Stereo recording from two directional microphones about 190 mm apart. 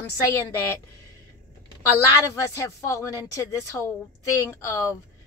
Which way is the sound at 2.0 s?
15° left (ahead or behind).